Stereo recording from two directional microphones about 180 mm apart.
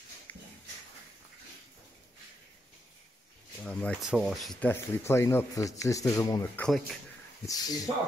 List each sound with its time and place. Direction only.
3.6 s speech: 5° left (ahead or behind)
6.6 s speech: centre (ahead or behind)
7.4 s speech: 20° left (ahead or behind)